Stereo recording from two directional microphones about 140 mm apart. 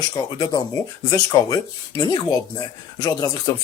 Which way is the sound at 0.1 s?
25° left (ahead or behind).